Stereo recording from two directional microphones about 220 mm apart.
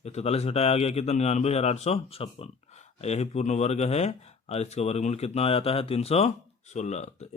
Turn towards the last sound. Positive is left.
turn(degrees=30)  # may be behind; listen again after turning